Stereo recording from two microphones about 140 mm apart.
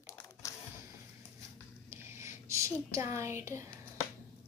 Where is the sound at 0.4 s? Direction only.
20° left (ahead or behind).